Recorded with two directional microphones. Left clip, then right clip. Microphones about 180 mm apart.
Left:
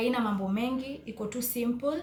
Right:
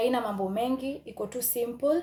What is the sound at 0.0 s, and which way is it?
Speech, 50° right (ahead or behind).